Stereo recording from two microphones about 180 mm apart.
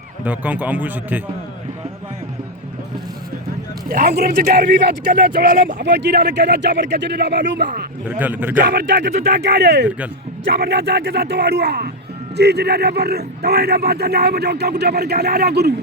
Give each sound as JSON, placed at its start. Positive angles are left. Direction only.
{"t": 0.3, "sound": "speech", "side_deg": -10}
{"t": 3.8, "sound": "speech", "side_deg": -55}
{"t": 5.6, "sound": "speech", "side_deg": -75}
{"t": 8.2, "sound": "speech", "side_deg": -10}
{"t": 8.5, "sound": "speech", "side_deg": -65}